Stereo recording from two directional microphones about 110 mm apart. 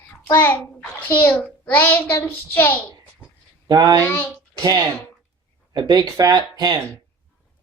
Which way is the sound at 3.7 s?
35° right (ahead or behind).